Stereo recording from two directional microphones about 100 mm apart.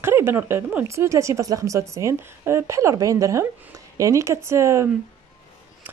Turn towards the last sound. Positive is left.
turn(degrees=-30)  # may be behind; listen again after turning